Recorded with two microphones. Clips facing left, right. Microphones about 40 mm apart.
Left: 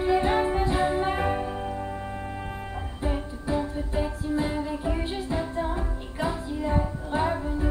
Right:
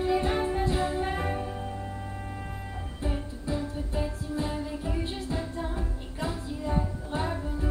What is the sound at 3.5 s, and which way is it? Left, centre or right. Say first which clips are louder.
Music: left 5 dB; left.